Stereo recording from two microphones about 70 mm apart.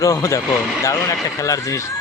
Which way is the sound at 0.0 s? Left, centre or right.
Left.